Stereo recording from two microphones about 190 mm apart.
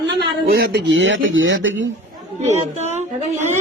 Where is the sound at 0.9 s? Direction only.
80° right.